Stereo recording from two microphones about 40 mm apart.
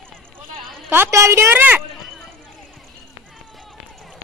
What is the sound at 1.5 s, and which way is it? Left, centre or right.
Speech, right.